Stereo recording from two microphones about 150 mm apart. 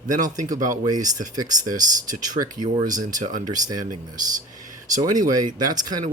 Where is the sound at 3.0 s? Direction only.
25° right (ahead or behind).